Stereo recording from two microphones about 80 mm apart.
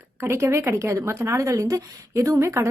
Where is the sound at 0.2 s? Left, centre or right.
Right.